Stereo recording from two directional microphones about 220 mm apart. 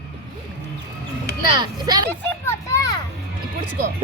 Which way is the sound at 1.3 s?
20° right (ahead or behind).